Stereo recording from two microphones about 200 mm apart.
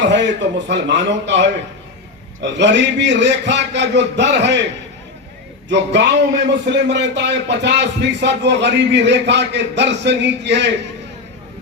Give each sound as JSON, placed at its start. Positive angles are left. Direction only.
{"t": 0.1, "sound": "speech", "side_deg": -60}
{"t": 5.6, "sound": "speech", "side_deg": -60}